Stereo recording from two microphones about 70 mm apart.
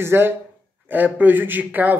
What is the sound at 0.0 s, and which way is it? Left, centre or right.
Speech, right.